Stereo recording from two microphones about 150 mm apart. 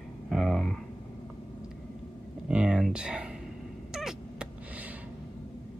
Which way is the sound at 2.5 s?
5° right (ahead or behind).